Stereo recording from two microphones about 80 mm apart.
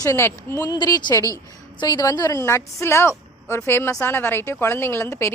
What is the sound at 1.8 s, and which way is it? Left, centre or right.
Speech, left.